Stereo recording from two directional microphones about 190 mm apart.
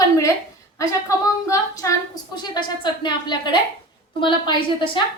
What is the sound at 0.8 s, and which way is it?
A woman's voice, 15° left (ahead or behind).